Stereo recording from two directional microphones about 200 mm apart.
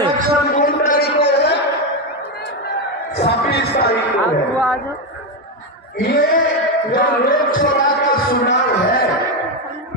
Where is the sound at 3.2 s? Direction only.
55° left (ahead or behind).